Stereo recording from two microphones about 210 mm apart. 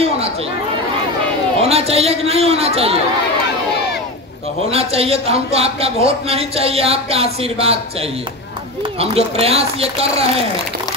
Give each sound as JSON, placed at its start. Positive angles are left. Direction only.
{"t": 1.6, "sound": "speech", "side_deg": -30}
{"t": 4.6, "sound": "speech", "side_deg": -30}
{"t": 9.0, "sound": "speech", "side_deg": -30}